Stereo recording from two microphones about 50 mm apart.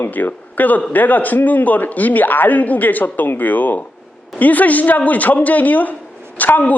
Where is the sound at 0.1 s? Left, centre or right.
Left.